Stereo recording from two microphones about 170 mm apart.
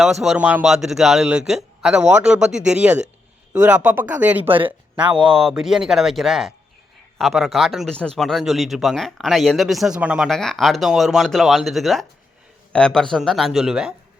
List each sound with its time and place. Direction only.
0.0 s speech: centre (ahead or behind)
4.4 s speech: 30° right (ahead or behind)
5.3 s speech: centre (ahead or behind)